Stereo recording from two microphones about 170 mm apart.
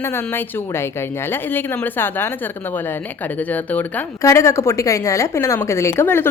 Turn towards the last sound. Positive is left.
turn(degrees=15)  # may be behind; listen again after turning